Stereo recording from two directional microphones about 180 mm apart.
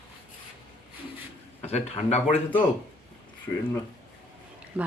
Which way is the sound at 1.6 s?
40° left (ahead or behind).